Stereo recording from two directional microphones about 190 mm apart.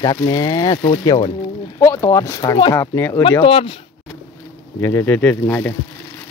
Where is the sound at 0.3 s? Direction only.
20° left (ahead or behind).